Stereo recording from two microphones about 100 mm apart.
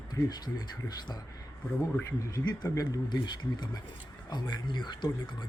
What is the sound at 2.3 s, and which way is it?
A man's voice, 40° left (ahead or behind).